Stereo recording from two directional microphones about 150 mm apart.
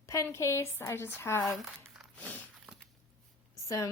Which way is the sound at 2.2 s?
10° left (ahead or behind).